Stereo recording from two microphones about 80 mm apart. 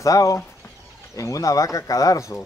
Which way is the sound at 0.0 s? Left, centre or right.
Left.